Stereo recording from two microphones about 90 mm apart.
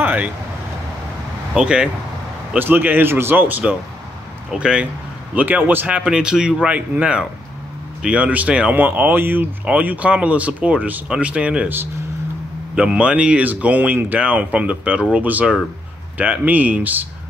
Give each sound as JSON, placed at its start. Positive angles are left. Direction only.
{"t": 0.0, "sound": "vehicle", "side_deg": -20}
{"t": 1.5, "sound": "speech", "side_deg": -10}
{"t": 2.5, "sound": "speech", "side_deg": -20}
{"t": 12.7, "sound": "speech", "side_deg": -10}